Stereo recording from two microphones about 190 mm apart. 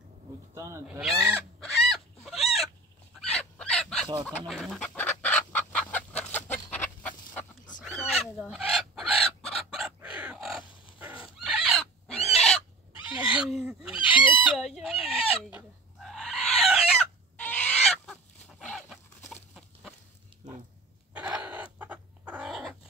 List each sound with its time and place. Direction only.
0.6 s speech: 15° right (ahead or behind)
0.8 s speech: 5° right (ahead or behind)
1.6 s chicken: centre (ahead or behind)
12.2 s owl: 35° left (ahead or behind)
13.1 s fowl: 5° right (ahead or behind)
14.1 s chicken: 25° left (ahead or behind)
14.4 s chicken: centre (ahead or behind)
17.5 s fowl: 5° left (ahead or behind)
18.6 s a sound: 5° left (ahead or behind)
19.3 s chicken: centre (ahead or behind)
21.1 s a sound: 5° right (ahead or behind)
21.7 s chicken: 10° right (ahead or behind)